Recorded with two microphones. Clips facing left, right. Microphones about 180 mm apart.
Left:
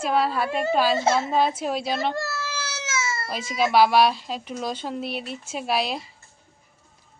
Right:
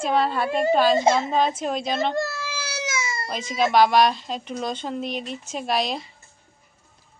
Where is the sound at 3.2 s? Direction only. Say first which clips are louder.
Right 2 dB; 5° left (ahead or behind).